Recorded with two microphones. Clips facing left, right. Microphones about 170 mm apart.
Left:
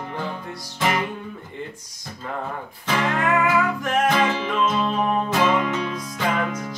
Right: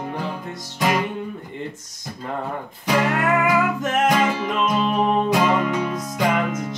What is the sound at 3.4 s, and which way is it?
Music, 15° right (ahead or behind).